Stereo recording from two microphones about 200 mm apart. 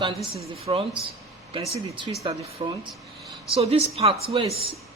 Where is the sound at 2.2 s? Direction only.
25° right (ahead or behind).